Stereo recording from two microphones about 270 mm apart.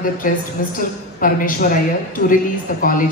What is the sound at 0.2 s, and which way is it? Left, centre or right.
A woman's voice, left.